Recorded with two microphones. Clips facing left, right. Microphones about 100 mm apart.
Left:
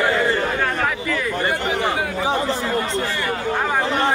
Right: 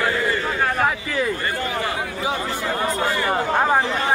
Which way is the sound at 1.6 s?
70° left (ahead or behind).